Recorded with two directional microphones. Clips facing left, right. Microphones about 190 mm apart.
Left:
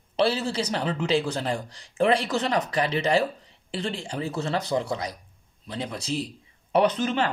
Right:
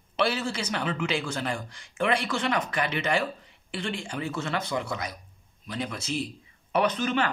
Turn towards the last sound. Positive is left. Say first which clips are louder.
# left 3 dB
turn(degrees=30)  # may be behind; listen again after turning